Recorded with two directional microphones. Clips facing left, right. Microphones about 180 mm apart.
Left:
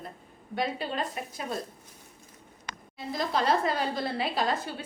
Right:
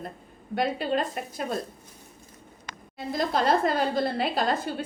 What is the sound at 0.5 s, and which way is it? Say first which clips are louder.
Speech: right 5 dB; 50° right (ahead or behind).